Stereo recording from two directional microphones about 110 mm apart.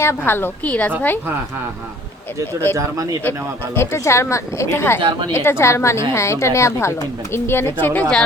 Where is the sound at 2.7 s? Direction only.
30° right (ahead or behind).